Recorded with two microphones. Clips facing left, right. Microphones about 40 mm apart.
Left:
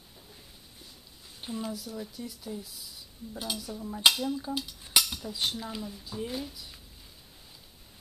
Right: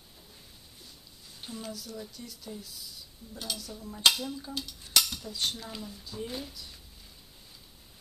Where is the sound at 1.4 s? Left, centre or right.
Centre.